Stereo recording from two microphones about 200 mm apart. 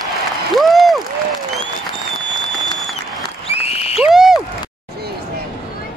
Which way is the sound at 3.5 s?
30° left (ahead or behind).